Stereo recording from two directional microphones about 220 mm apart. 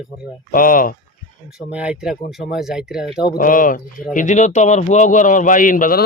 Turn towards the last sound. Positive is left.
turn(degrees=40)  # may be behind; listen again after turning